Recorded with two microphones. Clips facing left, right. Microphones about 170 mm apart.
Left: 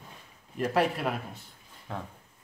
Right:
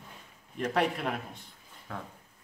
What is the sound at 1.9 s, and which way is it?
Speech, 20° left (ahead or behind).